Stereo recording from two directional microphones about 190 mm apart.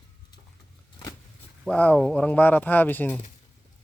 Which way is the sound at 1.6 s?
5° left (ahead or behind).